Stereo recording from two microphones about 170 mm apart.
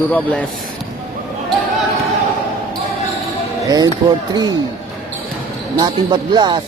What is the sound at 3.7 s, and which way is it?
Speech, 25° right (ahead or behind).